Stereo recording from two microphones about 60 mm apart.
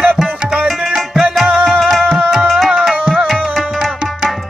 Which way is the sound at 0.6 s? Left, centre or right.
Centre.